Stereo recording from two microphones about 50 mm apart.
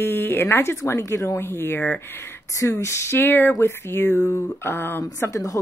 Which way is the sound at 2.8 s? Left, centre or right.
Left.